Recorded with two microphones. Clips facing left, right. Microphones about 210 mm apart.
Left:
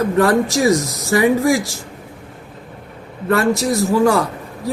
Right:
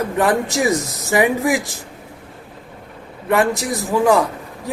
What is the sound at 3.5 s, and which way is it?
Speech, 15° right (ahead or behind).